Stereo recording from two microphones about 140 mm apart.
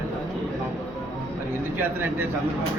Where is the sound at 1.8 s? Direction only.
15° right (ahead or behind).